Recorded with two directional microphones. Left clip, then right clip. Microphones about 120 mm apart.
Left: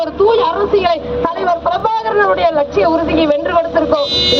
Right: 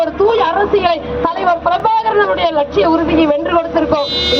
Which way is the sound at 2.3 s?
25° left (ahead or behind).